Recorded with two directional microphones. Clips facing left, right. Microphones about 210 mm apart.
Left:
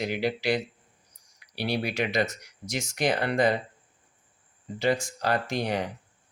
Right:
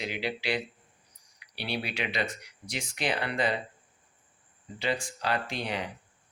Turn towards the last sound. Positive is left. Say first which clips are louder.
# left 5 dB
turn(degrees=45)  # may be behind; listen again after turning